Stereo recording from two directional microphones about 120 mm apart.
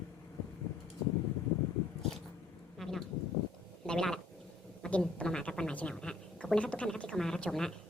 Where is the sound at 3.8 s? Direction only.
5° left (ahead or behind).